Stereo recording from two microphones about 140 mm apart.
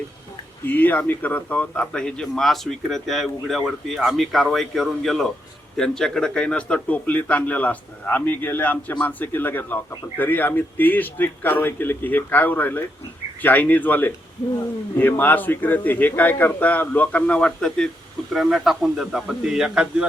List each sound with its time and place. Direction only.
0.7 s a man's voice: 15° left (ahead or behind); by 20.1 s 5° right (ahead or behind)